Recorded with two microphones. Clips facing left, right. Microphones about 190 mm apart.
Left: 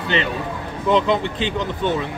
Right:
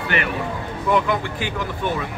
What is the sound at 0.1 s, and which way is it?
Speech, 20° left (ahead or behind).